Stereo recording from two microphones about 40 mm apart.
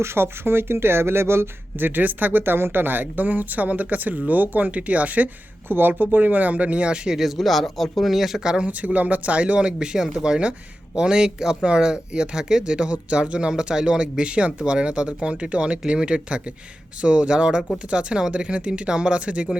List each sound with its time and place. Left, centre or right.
0.1 s speech: right
1.8 s speech: right
2.4 s speech: right
5.6 s speech: right
7.2 s speech: centre
8.1 s speech: centre
8.6 s speech: right